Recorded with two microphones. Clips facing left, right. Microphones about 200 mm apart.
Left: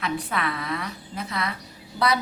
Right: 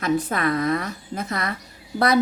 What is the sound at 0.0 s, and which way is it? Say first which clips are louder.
A woman's voice: right 6 dB; 45° right (ahead or behind).